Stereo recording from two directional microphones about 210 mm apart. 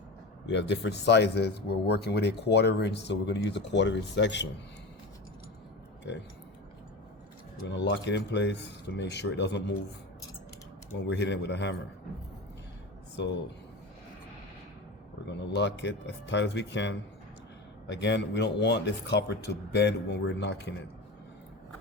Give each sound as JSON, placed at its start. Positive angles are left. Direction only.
{"t": 0.4, "sound": "speech", "side_deg": 55}
{"t": 7.7, "sound": "speech", "side_deg": 55}
{"t": 11.0, "sound": "speech", "side_deg": 55}
{"t": 13.2, "sound": "speech", "side_deg": 55}
{"t": 15.3, "sound": "speech", "side_deg": 55}